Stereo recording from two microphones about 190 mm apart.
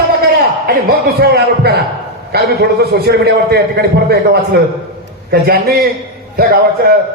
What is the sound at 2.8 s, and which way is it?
A man's voice, 55° right (ahead or behind).